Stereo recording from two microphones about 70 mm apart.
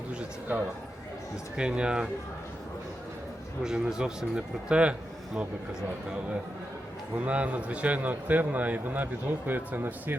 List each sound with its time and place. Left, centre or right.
0.2 s a man's voice: right
3.6 s a man's voice: centre
7.3 s a man's voice: centre